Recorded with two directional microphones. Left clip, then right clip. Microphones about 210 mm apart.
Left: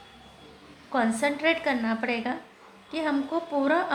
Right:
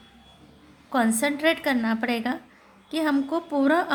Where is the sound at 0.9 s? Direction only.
35° right (ahead or behind).